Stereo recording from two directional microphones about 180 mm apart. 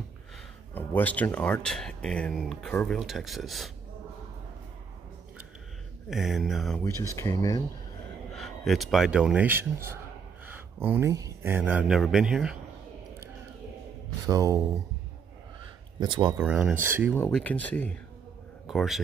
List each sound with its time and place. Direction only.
0.7 s speech: 10° left (ahead or behind)
6.0 s speech: centre (ahead or behind)
6.8 s speech: 15° left (ahead or behind)
8.4 s speech: centre (ahead or behind)
14.2 s speech: 20° right (ahead or behind)
16.0 s speech: 25° right (ahead or behind)
16.3 s speech: 5° right (ahead or behind)
17.1 s speech: 5° left (ahead or behind)